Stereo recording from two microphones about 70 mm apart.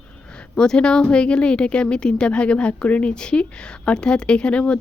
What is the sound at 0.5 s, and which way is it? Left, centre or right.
Speech, centre.